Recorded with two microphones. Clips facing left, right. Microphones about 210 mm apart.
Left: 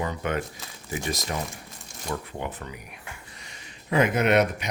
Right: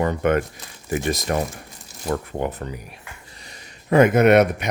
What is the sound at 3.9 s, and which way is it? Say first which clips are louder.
Speech: right 8 dB; 50° right (ahead or behind).